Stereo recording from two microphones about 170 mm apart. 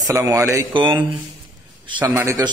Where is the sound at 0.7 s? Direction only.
30° right (ahead or behind).